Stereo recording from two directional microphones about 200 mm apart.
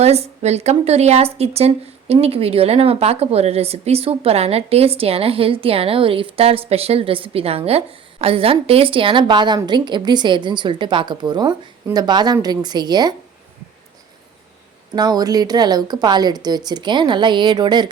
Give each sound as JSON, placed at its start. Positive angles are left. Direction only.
{"t": 0.0, "sound": "a woman's voice", "side_deg": -30}
{"t": 14.9, "sound": "a woman's voice", "side_deg": -20}